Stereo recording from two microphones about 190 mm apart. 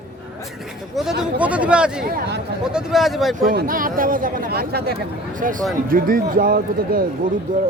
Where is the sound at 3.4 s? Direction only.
55° right (ahead or behind).